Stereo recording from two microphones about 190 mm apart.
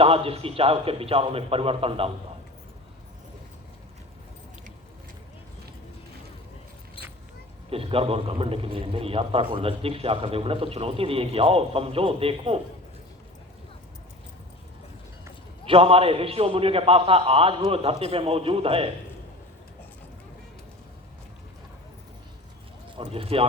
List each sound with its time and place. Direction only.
0.0 s a man's voice: 30° right (ahead or behind)
7.7 s a man's voice: 30° right (ahead or behind)
15.6 s a man's voice: 30° right (ahead or behind)
23.0 s speech: 30° right (ahead or behind)